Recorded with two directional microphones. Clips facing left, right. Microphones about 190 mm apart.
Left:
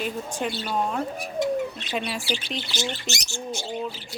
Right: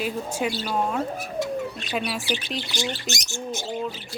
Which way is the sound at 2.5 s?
20° left (ahead or behind).